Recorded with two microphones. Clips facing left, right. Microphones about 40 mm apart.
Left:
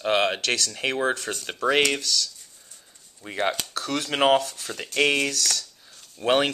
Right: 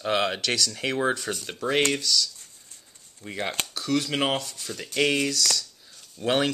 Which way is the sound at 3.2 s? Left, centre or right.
Left.